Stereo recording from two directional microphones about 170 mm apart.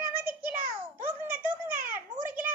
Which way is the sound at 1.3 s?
55° right (ahead or behind).